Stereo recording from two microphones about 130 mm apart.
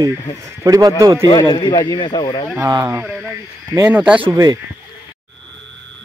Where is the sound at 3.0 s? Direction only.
5° left (ahead or behind).